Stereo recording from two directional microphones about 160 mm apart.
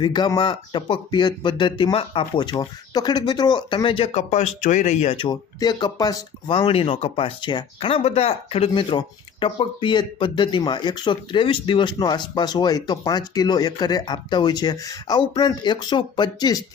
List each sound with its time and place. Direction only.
0.0 s speech: 25° left (ahead or behind)